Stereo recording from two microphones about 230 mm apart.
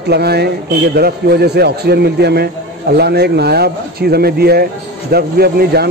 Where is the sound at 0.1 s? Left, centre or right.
Right.